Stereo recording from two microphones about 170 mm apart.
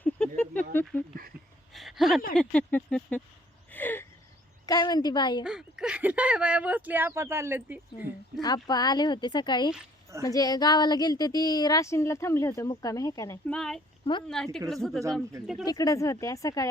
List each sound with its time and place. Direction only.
0.0 s a sound: 10° left (ahead or behind)
0.9 s speech: 15° left (ahead or behind)
1.7 s a sound: centre (ahead or behind)
2.3 s speech: 5° left (ahead or behind)
3.7 s a sound: 10° left (ahead or behind)
4.6 s a woman's voice: 25° left (ahead or behind)
5.4 s speech: 5° right (ahead or behind)
8.4 s a woman's voice: 25° left (ahead or behind)
13.5 s speech: 5° left (ahead or behind)
14.0 s speech: 30° left (ahead or behind)
14.3 s speech: 5° left (ahead or behind)
15.6 s a woman's voice: 20° left (ahead or behind)